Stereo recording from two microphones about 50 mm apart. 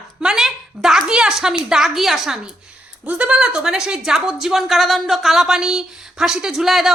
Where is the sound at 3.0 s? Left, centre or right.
Right.